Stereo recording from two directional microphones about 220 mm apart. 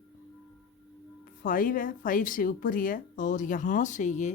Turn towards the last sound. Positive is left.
turn(degrees=35)  # may be behind; listen again after turning